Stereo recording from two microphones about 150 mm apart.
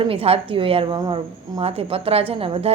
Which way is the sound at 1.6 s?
40° right (ahead or behind).